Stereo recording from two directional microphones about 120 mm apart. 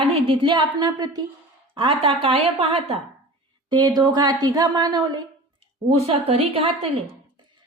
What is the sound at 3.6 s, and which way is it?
Speech, 40° right (ahead or behind).